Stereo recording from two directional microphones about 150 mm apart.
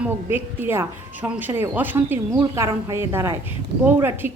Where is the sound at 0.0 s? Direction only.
15° right (ahead or behind).